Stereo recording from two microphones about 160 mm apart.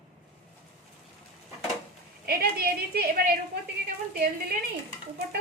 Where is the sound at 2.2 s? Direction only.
75° right (ahead or behind).